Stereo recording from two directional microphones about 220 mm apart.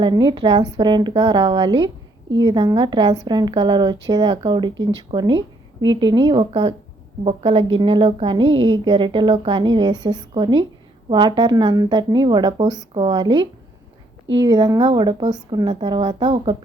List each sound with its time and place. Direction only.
0.0 s speech: 20° right (ahead or behind)